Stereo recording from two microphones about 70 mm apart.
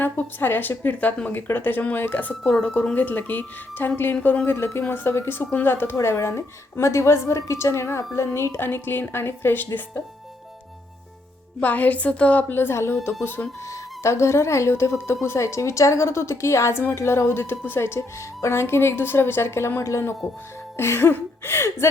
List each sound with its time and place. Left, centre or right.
0.0 s a woman's voice: left
11.6 s speech: left
14.0 s a woman's voice: left